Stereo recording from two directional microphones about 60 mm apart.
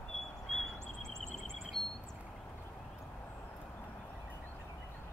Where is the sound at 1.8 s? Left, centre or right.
Centre.